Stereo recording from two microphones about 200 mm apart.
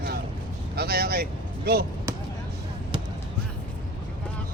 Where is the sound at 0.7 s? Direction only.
50° right (ahead or behind).